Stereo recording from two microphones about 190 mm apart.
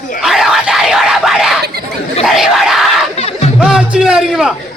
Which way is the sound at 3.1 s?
30° left (ahead or behind).